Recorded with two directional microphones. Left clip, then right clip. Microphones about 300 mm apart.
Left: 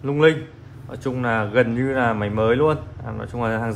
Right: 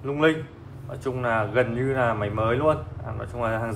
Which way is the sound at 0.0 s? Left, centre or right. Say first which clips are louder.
Left 5 dB; left.